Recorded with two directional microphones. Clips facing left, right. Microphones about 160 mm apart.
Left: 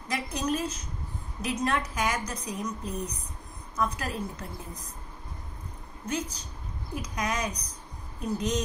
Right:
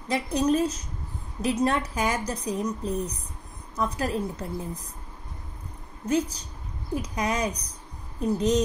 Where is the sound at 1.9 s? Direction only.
35° right (ahead or behind).